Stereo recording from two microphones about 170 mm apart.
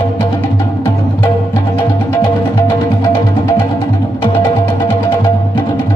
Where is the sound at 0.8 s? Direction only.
20° left (ahead or behind).